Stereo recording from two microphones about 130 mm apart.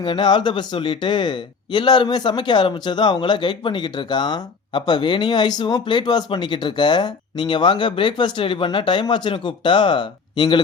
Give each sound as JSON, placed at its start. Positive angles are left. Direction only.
{"t": 0.0, "sound": "speech", "side_deg": 35}